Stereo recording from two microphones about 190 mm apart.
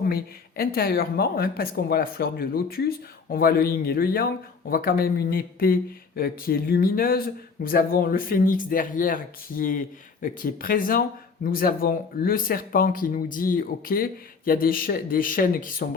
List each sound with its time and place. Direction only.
0.0 s speech: 50° left (ahead or behind)